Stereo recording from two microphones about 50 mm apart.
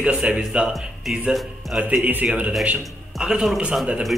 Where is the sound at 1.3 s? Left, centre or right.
Centre.